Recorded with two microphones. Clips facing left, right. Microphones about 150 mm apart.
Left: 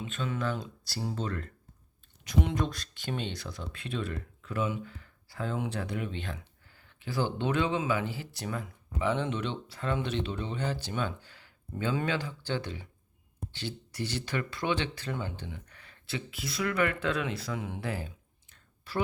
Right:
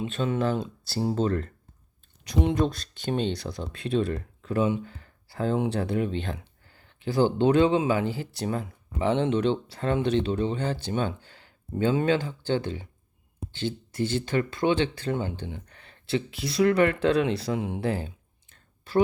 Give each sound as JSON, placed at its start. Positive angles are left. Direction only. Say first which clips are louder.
{"t": 0.0, "sound": "speech", "louder": "right 7 dB", "side_deg": -35}